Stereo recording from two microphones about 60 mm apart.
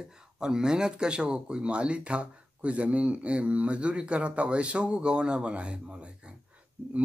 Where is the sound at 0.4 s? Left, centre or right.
Centre.